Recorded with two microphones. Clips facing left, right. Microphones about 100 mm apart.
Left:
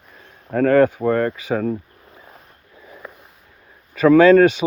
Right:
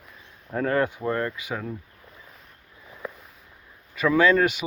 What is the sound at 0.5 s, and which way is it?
Speech, 90° left.